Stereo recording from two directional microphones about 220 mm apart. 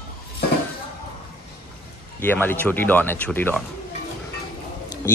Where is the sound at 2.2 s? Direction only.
10° left (ahead or behind).